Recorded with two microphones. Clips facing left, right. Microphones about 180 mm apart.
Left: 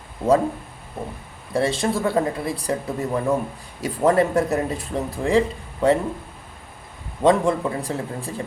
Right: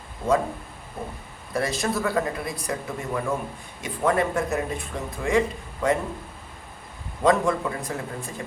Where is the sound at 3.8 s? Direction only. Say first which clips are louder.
Left 5 dB; 35° left (ahead or behind).